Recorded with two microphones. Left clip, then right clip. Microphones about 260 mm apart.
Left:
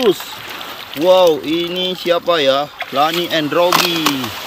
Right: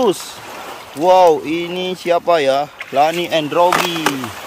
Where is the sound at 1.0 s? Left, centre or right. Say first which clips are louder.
Right 1 dB; centre.